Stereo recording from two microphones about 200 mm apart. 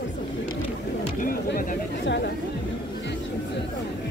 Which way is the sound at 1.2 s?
45° left (ahead or behind).